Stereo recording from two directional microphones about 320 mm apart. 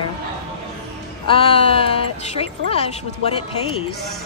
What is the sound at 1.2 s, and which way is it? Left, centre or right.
A woman's voice, centre.